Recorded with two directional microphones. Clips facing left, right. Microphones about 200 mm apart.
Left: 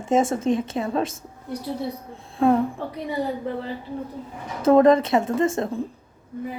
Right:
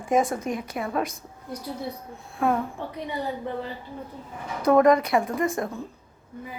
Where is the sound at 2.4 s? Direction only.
30° left (ahead or behind).